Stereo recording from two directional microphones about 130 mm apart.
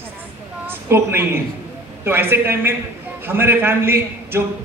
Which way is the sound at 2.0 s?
20° right (ahead or behind).